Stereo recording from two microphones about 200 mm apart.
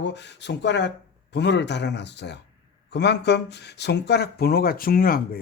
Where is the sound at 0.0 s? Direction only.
60° left (ahead or behind).